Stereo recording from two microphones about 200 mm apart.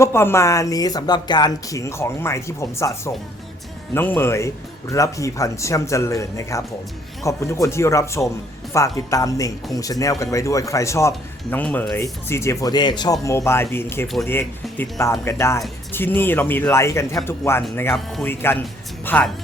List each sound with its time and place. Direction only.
0.0 s speech: 10° left (ahead or behind)